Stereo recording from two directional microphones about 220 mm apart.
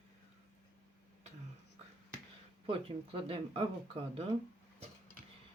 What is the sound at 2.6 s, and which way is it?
Speech, 25° right (ahead or behind).